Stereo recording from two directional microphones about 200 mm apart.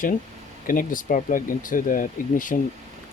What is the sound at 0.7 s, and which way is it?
Speech, 45° left (ahead or behind).